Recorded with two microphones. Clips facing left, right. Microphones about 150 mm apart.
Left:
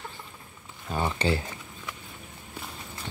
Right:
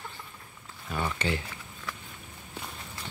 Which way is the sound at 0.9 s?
30° left (ahead or behind).